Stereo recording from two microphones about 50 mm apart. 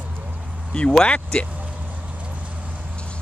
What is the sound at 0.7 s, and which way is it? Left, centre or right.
Speech, centre.